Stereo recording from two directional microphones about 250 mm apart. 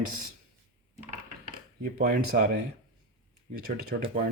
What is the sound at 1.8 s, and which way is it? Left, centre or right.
Speech, right.